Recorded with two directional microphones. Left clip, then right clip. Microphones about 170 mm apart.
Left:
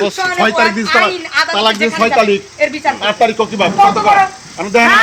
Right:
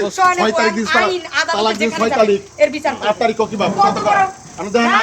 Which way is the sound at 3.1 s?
45° left (ahead or behind).